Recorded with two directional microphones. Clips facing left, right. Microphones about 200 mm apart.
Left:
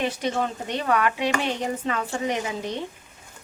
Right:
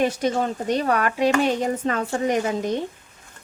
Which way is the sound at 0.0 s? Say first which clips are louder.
Right 4 dB; 45° right (ahead or behind).